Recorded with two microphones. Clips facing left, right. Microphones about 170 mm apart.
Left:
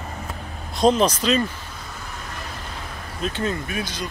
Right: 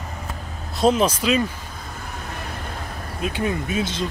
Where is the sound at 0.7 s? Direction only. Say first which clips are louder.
Even; 5° right (ahead or behind).